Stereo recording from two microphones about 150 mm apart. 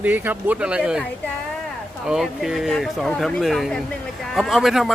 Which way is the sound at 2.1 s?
5° right (ahead or behind).